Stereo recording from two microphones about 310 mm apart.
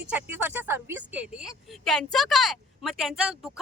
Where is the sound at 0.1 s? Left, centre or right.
Centre.